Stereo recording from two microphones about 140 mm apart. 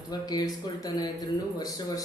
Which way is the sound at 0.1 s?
30° left (ahead or behind).